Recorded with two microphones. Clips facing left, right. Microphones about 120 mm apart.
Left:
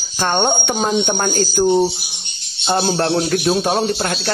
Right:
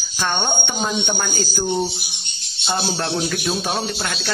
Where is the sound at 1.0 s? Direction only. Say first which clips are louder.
Left 6 dB; 55° left (ahead or behind).